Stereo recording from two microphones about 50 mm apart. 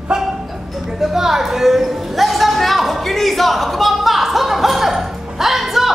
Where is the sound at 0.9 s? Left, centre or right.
Centre.